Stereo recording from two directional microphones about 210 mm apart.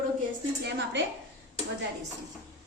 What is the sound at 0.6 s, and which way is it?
Speech, 55° right (ahead or behind).